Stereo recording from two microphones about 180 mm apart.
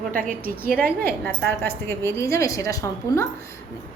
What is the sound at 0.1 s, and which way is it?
Speech, 50° right (ahead or behind).